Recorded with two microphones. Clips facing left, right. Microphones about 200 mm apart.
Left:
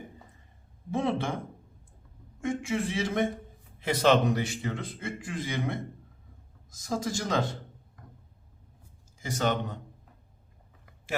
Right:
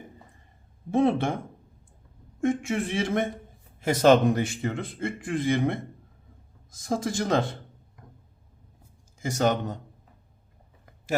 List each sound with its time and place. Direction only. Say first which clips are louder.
0.9 s a man's voice: right 6 dB; 55° right (ahead or behind)
2.4 s a man's voice: right 4 dB; 55° right (ahead or behind)
7.0 s a man's voice: right 6 dB; 55° right (ahead or behind)
9.2 s a man's voice: right 4 dB; 45° right (ahead or behind)
10.8 s a sound: right 5 dB; 40° right (ahead or behind)